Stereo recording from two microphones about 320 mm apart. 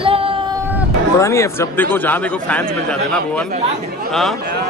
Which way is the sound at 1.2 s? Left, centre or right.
Centre.